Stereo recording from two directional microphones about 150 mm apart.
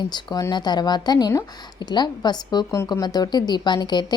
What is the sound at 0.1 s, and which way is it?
A woman's voice, 30° left (ahead or behind).